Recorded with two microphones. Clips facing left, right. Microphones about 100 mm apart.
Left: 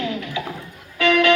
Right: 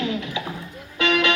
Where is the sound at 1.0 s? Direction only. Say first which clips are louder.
Left 4 dB; 20° right (ahead or behind).